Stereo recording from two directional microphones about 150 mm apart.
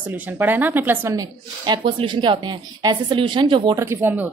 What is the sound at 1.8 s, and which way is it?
Speech, 35° right (ahead or behind).